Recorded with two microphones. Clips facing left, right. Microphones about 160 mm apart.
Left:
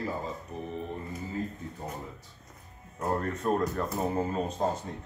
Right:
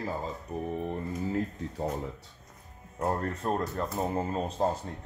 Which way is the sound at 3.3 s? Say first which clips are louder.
Left 3 dB; 30° right (ahead or behind).